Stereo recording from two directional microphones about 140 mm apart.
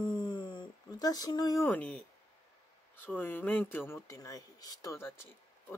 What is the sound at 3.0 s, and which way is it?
Speech, 15° left (ahead or behind).